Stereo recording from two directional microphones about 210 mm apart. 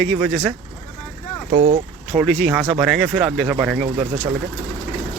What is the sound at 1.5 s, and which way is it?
Speech, 30° right (ahead or behind).